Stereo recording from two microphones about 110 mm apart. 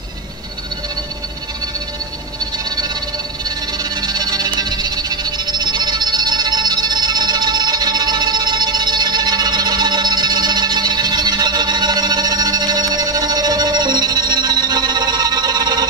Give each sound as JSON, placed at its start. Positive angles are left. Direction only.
{"t": 3.4, "sound": "music", "side_deg": -40}